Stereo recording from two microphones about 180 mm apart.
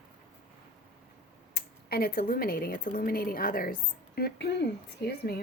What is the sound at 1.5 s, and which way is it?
Speech, 60° left (ahead or behind).